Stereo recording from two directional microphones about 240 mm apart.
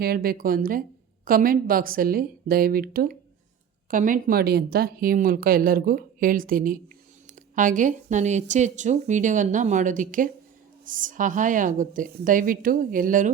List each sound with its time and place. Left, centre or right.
0.0 s a woman's voice: right